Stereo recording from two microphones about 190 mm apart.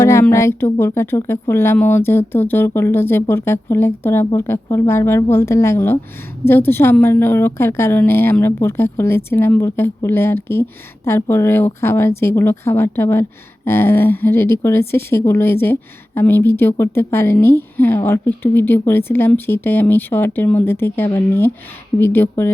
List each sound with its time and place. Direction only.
0.0 s speech: 15° left (ahead or behind)